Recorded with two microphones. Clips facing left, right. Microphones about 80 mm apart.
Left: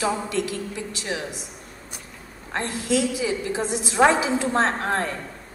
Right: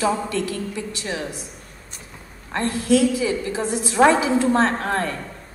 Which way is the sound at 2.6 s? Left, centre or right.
Left.